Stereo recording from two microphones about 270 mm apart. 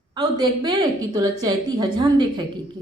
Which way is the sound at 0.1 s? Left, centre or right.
Centre.